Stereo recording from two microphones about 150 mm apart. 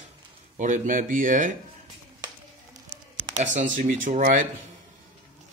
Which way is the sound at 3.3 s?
55° right (ahead or behind).